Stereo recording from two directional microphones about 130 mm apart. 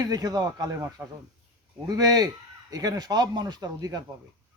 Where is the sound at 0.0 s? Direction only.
30° right (ahead or behind).